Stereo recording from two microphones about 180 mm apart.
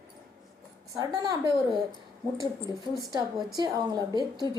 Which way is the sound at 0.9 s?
20° right (ahead or behind).